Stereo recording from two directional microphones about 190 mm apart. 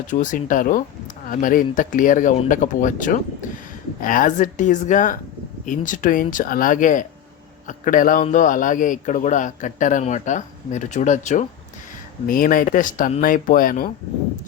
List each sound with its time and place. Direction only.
0.1 s a man's voice: 40° left (ahead or behind)